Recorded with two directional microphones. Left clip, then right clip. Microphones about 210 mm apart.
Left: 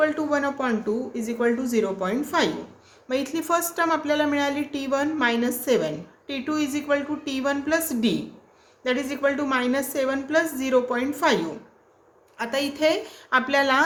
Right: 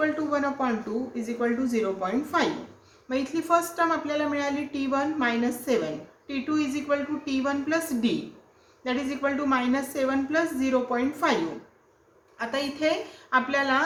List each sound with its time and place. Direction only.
0.0 s speech: 55° left (ahead or behind)
12.4 s speech: 50° left (ahead or behind)